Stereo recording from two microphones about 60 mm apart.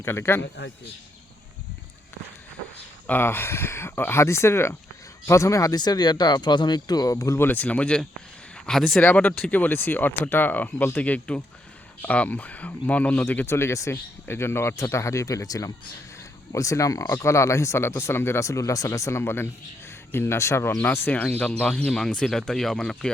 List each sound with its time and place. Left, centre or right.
0.0 s speech: left
3.1 s speech: left
4.2 s speech: left
5.2 s speech: left
6.9 s speech: left
7.5 s speech: left
9.0 s speech: left
13.4 s speech: left
14.8 s speech: left
16.5 s speech: left
17.1 s speech: left
18.4 s speech: left
21.3 s speech: centre